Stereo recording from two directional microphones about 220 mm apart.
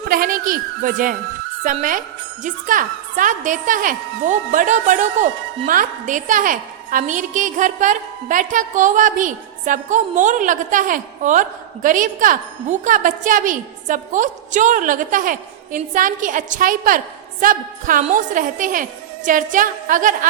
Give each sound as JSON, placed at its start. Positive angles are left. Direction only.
{"t": 0.1, "sound": "speech", "side_deg": -40}